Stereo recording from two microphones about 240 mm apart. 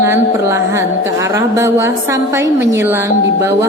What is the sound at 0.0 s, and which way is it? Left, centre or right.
A woman's voice, centre.